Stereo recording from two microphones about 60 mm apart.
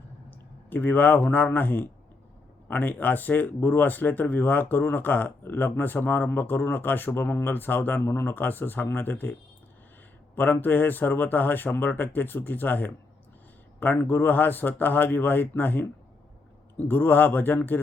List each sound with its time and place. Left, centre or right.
0.3 s a man's voice: left
10.3 s speech: left
14.0 s speech: left